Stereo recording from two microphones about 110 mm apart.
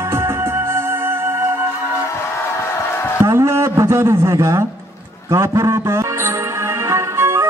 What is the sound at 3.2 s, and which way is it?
Music, 25° right (ahead or behind).